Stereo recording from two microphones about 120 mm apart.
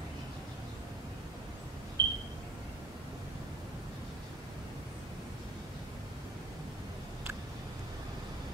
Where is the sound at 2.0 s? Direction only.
40° right (ahead or behind).